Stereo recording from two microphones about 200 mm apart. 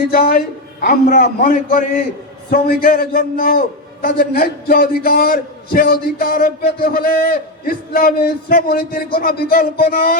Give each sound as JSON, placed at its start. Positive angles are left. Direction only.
{"t": 0.1, "sound": "a man's voice", "side_deg": 45}